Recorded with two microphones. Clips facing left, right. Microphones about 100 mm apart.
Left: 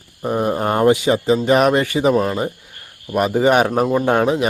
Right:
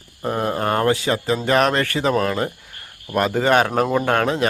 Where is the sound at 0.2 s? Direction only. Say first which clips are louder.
Left 3 dB; 10° left (ahead or behind).